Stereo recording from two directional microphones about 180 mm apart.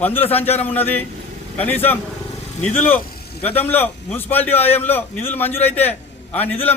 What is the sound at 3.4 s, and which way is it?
A man's voice, 10° left (ahead or behind).